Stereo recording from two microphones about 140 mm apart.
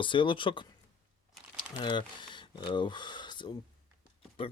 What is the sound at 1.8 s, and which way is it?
Speech, 35° left (ahead or behind).